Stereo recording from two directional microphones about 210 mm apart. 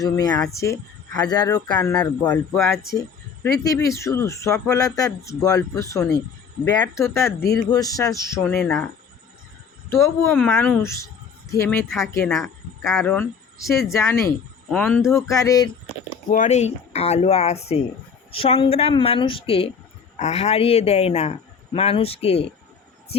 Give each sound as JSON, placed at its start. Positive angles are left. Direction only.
{"t": 0.0, "sound": "a man's voice", "side_deg": 15}
{"t": 2.3, "sound": "speech", "side_deg": 10}
{"t": 7.3, "sound": "speech", "side_deg": 50}
{"t": 7.6, "sound": "speech", "side_deg": 15}
{"t": 10.5, "sound": "speech", "side_deg": 10}
{"t": 16.3, "sound": "a man's voice", "side_deg": 35}